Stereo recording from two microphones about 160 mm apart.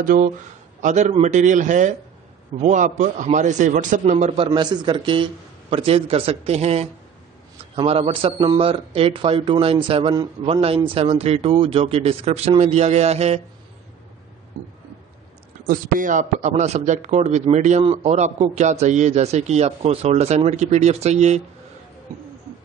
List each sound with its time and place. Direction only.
0.0 s a man's voice: 55° right (ahead or behind)
4.5 s a man's voice: 30° right (ahead or behind)
15.6 s a man's voice: 60° right (ahead or behind); by 21.4 s 45° right (ahead or behind)